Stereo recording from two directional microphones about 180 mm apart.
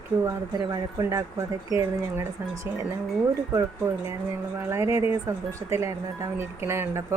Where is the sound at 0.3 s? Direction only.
20° right (ahead or behind).